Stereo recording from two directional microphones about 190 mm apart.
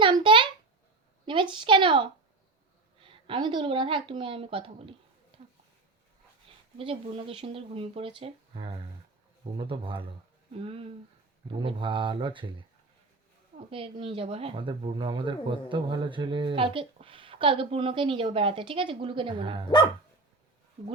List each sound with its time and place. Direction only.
0.0 s a sound: 25° right (ahead or behind)
1.2 s speech: 25° right (ahead or behind)
6.7 s speech: 30° right (ahead or behind)
13.7 s speech: 30° right (ahead or behind)
19.6 s speech: 25° left (ahead or behind)